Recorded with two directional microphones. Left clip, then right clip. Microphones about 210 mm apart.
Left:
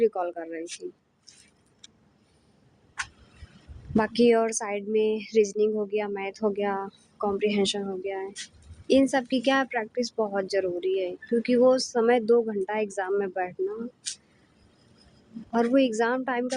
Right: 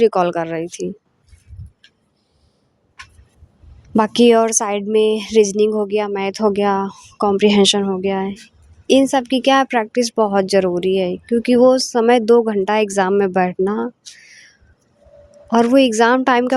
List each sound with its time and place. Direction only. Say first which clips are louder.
0.0 s speech: right 11 dB; 40° right (ahead or behind)
3.9 s speech: right 9 dB; 40° right (ahead or behind)
15.5 s speech: right 10 dB; 40° right (ahead or behind)